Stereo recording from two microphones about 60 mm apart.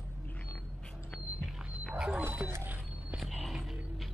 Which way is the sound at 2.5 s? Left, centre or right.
Right.